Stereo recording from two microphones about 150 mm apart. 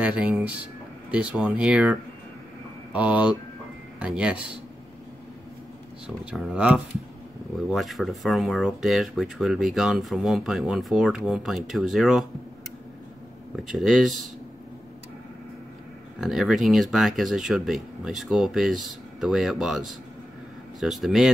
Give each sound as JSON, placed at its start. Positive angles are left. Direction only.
{"t": 0.0, "sound": "speech", "side_deg": -10}
{"t": 6.0, "sound": "speech", "side_deg": -5}
{"t": 13.7, "sound": "speech", "side_deg": 0}
{"t": 16.2, "sound": "speech", "side_deg": 0}